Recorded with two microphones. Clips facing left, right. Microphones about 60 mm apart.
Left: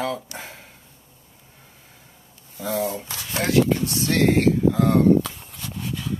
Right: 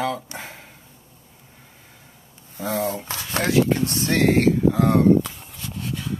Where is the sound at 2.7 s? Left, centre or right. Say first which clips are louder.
Even; right.